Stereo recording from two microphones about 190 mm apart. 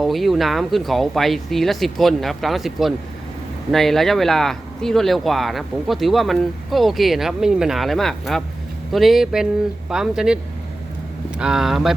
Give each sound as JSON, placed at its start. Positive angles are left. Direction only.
{"t": 0.0, "sound": "speech", "side_deg": 0}
{"t": 11.3, "sound": "speech", "side_deg": -5}